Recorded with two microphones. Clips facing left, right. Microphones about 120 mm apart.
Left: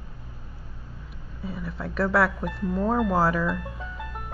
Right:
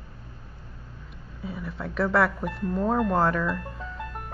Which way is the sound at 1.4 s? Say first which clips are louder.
Left 1 dB; centre (ahead or behind).